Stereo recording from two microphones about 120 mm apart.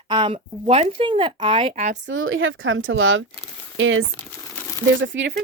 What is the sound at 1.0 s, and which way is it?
Speech, 45° right (ahead or behind).